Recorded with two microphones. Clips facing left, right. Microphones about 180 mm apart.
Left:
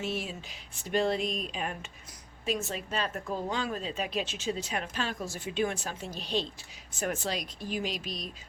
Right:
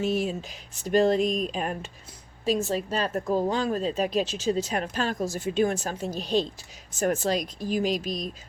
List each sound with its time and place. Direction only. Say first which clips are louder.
0.0 s speech: right 8 dB; 40° right (ahead or behind)